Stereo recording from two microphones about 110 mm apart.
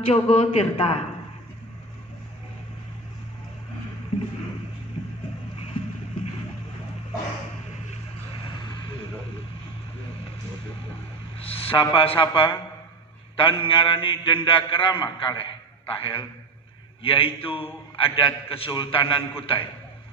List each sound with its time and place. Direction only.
0.0 s speech: 70° left (ahead or behind)
11.4 s a man's voice: 60° left (ahead or behind)